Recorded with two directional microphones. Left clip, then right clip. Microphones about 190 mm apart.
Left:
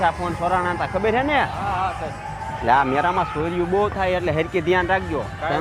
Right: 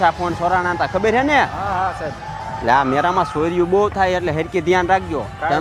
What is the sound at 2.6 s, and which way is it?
Speech, 15° right (ahead or behind).